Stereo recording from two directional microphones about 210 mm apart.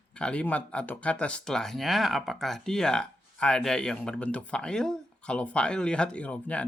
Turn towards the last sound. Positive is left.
turn(degrees=5)  # may be behind; listen again after turning